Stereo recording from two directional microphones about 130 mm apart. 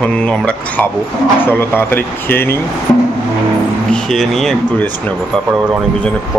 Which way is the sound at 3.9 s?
5° left (ahead or behind).